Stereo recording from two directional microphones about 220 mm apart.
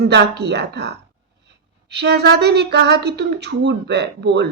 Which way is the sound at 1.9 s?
50° right (ahead or behind).